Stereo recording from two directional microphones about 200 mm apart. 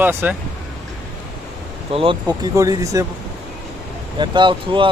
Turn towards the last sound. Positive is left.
turn(degrees=-25)  # may be behind; listen again after turning